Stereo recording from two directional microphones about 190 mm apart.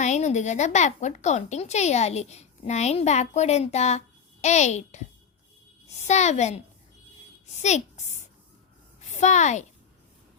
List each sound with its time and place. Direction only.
0.0 s a woman's voice: 40° left (ahead or behind)
6.1 s a woman's voice: 35° left (ahead or behind)
7.6 s a woman's voice: 35° left (ahead or behind)